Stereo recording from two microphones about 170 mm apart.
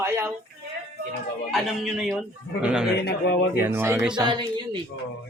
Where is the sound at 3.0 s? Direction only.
90° left.